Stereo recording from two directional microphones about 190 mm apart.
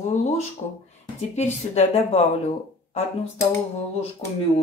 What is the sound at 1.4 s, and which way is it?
Speech, 35° left (ahead or behind).